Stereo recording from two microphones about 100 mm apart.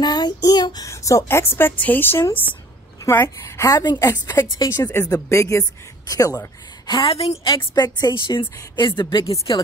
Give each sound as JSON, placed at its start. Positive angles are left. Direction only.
{"t": 0.0, "sound": "child singing", "side_deg": 45}
{"t": 0.8, "sound": "speech", "side_deg": 30}
{"t": 4.1, "sound": "speech", "side_deg": 25}
{"t": 7.1, "sound": "a woman's voice", "side_deg": 90}
{"t": 7.4, "sound": "a woman's voice", "side_deg": 50}